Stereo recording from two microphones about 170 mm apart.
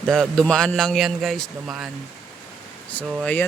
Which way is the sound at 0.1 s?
5° left (ahead or behind).